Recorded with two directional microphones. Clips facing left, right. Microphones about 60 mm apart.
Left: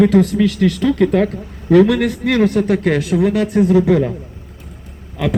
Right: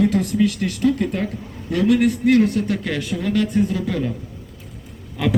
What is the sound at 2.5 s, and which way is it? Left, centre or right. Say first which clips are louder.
Speech: left 7 dB; left.